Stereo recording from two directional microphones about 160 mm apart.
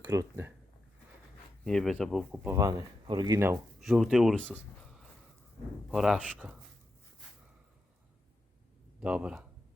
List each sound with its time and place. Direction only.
0.0 s speech: 15° right (ahead or behind)
1.6 s speech: 5° left (ahead or behind)
2.4 s speech: 20° right (ahead or behind)
3.8 s speech: centre (ahead or behind)
9.0 s speech: 5° right (ahead or behind)